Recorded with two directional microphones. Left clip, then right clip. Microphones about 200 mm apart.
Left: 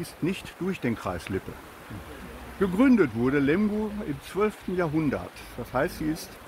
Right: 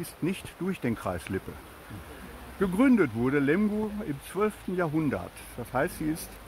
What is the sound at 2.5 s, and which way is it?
Speech, 45° right (ahead or behind).